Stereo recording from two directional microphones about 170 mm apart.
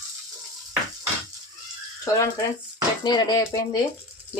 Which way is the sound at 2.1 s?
20° left (ahead or behind).